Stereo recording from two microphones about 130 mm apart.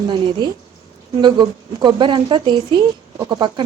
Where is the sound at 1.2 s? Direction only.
35° right (ahead or behind).